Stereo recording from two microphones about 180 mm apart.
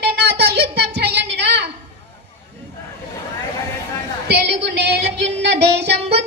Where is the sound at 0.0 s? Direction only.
65° right (ahead or behind).